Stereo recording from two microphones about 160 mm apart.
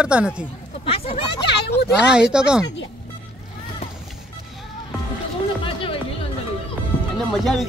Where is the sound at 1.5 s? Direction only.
90° left.